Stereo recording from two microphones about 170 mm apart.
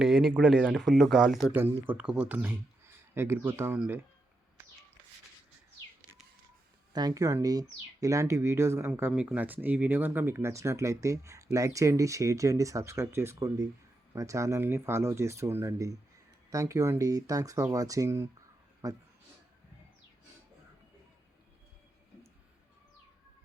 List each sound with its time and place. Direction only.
0.0 s speech: centre (ahead or behind)
6.9 s speech: 20° right (ahead or behind)